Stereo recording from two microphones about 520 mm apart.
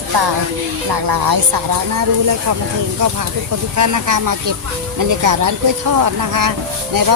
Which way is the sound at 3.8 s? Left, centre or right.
Right.